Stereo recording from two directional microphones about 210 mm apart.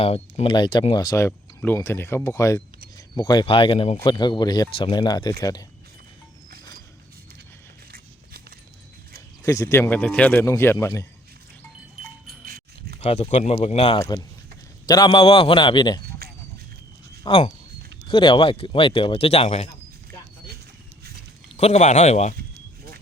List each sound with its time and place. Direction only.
0.0 s speech: 25° left (ahead or behind)
7.9 s horse: 45° right (ahead or behind)
9.4 s speech: 15° left (ahead or behind)
12.5 s keys jangling: 45° right (ahead or behind)
13.0 s speech: 30° left (ahead or behind)
14.0 s speech: 15° left (ahead or behind)
16.2 s a sound: 50° right (ahead or behind)
17.2 s speech: 25° left (ahead or behind)
21.5 s speech: 30° left (ahead or behind)